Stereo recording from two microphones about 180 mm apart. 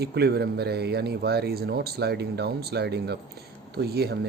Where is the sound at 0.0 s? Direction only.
65° right (ahead or behind).